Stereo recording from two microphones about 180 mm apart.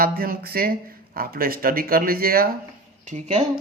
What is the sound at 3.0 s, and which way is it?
Speech, 40° right (ahead or behind).